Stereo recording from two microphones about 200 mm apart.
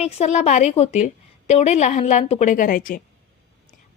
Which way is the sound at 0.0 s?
35° left (ahead or behind).